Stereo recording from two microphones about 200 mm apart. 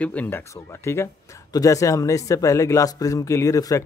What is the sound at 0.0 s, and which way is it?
Speech, 5° left (ahead or behind).